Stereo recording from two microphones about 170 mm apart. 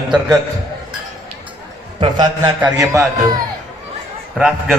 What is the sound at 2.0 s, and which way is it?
Speech, 25° right (ahead or behind).